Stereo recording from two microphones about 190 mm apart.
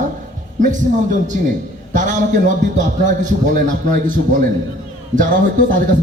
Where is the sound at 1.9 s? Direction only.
40° right (ahead or behind).